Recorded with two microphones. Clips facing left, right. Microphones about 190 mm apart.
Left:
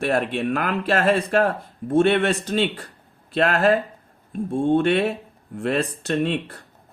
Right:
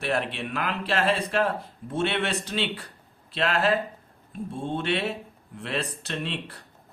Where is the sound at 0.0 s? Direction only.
45° left (ahead or behind).